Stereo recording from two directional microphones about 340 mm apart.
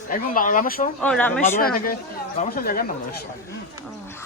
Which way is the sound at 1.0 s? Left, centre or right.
Centre.